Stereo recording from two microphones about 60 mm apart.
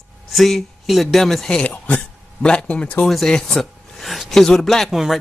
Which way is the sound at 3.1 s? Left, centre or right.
Centre.